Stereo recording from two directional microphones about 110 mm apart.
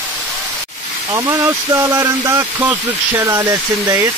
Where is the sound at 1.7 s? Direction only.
30° right (ahead or behind).